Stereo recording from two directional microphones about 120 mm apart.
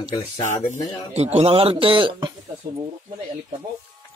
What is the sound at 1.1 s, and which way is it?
A man's voice, 65° right (ahead or behind).